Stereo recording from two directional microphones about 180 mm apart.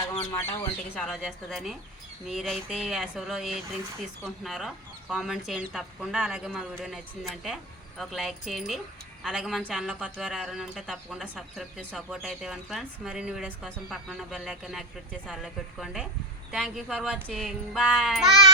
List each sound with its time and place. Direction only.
0.1 s speech: 20° left (ahead or behind)
0.9 s speech: 5° left (ahead or behind)